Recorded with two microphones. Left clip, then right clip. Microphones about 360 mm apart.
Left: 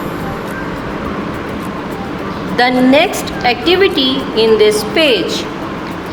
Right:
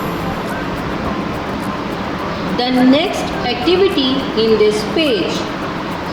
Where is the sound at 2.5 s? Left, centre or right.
Centre.